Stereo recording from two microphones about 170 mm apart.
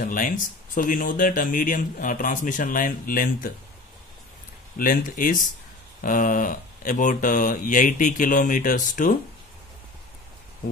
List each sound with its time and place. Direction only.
0.0 s speech: 55° left (ahead or behind)
4.7 s speech: 50° left (ahead or behind)